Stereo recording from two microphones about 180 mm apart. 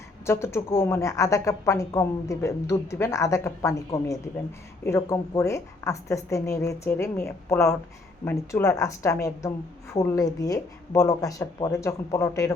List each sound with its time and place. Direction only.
0.3 s a woman's voice: 15° left (ahead or behind)